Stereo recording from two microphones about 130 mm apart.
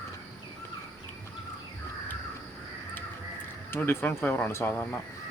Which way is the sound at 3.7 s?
15° left (ahead or behind).